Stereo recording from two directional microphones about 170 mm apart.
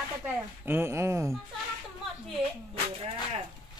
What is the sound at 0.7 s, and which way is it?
Speech, 15° right (ahead or behind).